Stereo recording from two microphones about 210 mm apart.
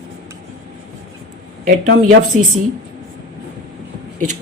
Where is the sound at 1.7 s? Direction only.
75° right (ahead or behind).